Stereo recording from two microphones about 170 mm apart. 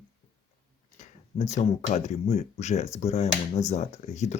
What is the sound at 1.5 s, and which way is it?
Speech, 45° left (ahead or behind).